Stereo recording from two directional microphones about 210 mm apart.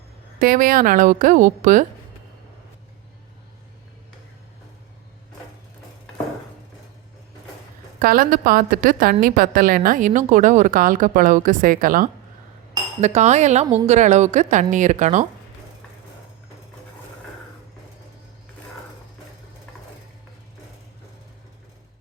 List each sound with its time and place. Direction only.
0.3 s a woman's voice: 45° right (ahead or behind)
7.9 s a woman's voice: 45° right (ahead or behind)